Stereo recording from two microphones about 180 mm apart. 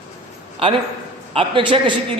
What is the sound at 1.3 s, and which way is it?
Speech, 30° right (ahead or behind).